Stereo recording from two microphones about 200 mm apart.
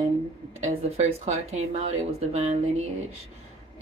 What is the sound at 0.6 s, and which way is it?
Speech, 30° right (ahead or behind).